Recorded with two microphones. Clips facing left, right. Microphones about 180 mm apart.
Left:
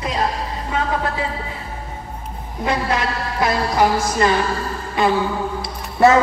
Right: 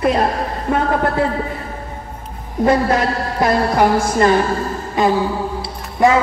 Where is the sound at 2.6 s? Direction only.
45° right (ahead or behind).